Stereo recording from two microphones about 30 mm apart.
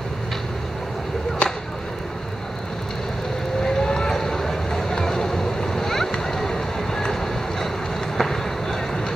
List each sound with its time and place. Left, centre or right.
1.4 s chop: left
3.6 s vehicle: left
8.2 s a sound: centre